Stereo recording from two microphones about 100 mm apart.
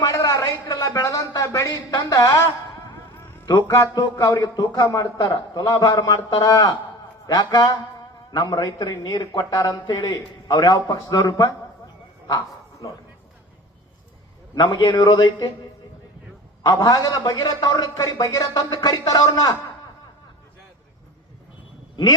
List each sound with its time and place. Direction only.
0.0 s a sound: 35° left (ahead or behind)
0.9 s speech: 40° left (ahead or behind)
4.1 s speech: 35° left (ahead or behind)
14.5 s speech: 40° left (ahead or behind)
16.6 s speech: 40° left (ahead or behind)